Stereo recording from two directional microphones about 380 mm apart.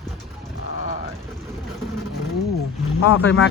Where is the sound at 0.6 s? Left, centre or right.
Left.